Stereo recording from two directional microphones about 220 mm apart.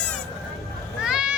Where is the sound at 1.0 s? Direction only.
5° right (ahead or behind).